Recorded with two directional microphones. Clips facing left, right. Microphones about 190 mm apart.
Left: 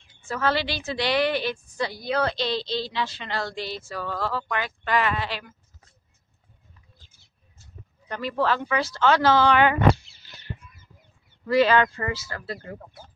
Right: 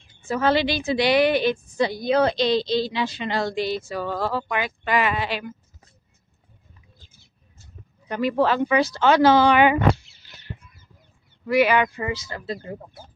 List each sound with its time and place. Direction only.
0.2 s a woman's voice: 15° right (ahead or behind)
8.1 s a woman's voice: 15° right (ahead or behind)
11.4 s a woman's voice: 15° right (ahead or behind)